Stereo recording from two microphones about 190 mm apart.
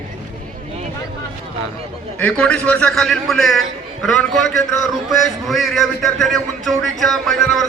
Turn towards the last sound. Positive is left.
turn(degrees=0)  # may be behind; listen again after turning